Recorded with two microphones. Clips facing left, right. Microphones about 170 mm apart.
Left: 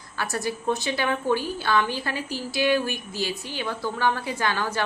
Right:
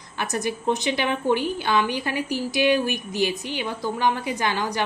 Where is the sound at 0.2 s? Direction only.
20° right (ahead or behind).